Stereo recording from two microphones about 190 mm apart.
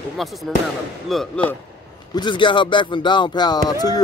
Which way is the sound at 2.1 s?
25° left (ahead or behind).